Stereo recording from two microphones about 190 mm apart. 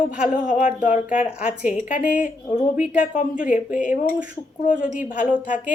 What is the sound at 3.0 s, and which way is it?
A woman's voice, 45° left (ahead or behind).